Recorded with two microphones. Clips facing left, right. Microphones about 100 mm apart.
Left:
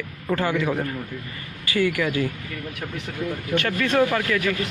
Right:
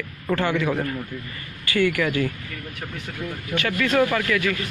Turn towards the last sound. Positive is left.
turn(degrees=30)  # may be behind; listen again after turning